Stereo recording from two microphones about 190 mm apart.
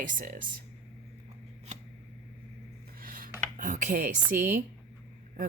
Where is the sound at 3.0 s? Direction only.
50° right (ahead or behind).